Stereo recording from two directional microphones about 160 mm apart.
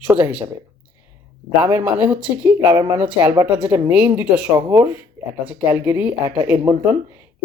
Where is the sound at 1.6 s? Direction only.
10° right (ahead or behind).